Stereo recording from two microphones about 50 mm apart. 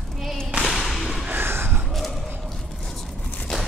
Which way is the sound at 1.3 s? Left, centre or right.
Right.